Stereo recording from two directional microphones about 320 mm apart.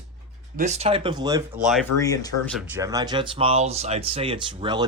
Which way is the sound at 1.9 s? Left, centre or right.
Centre.